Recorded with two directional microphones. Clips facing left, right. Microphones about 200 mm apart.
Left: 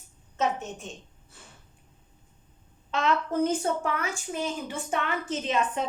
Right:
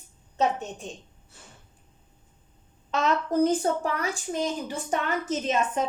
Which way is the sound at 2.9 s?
40° right (ahead or behind).